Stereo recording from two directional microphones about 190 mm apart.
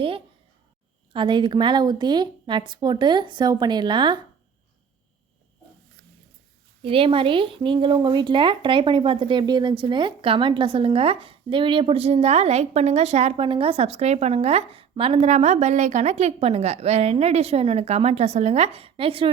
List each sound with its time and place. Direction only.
1.1 s speech: 25° right (ahead or behind)
6.8 s speech: 30° right (ahead or behind)